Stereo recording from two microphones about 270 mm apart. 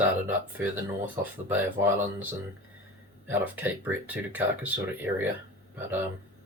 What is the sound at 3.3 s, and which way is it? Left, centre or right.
Speech, centre.